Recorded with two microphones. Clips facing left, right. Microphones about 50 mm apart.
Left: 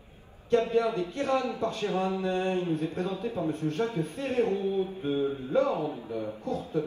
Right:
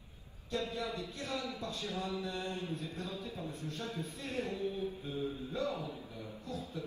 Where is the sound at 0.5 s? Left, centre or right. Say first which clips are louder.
Left 13 dB; left.